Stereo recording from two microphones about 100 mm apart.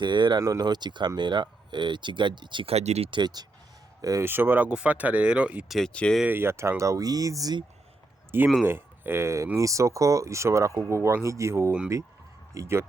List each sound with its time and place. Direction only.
0.0 s speech: 50° right (ahead or behind)
2.6 s speech: 90° right
3.1 s speech: 50° right (ahead or behind)
4.0 s speech: 35° right (ahead or behind)
4.3 s speech: 20° right (ahead or behind)
5.6 s speech: centre (ahead or behind)
5.9 s speech: 10° left (ahead or behind)
6.2 s speech: 20° right (ahead or behind)
8.6 s speech: 20° right (ahead or behind)